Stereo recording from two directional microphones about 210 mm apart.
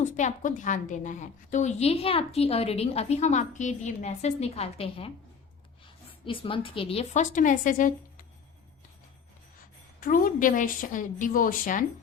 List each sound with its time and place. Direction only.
0.0 s a woman's voice: 35° left (ahead or behind)
6.2 s a woman's voice: 25° left (ahead or behind)
10.0 s a woman's voice: 40° left (ahead or behind)